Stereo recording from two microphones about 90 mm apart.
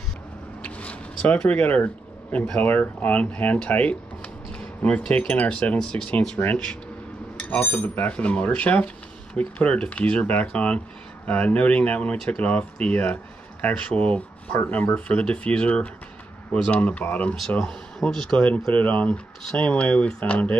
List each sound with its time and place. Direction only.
0.7 s zipper: 15° left (ahead or behind)
2.3 s speech: 15° left (ahead or behind)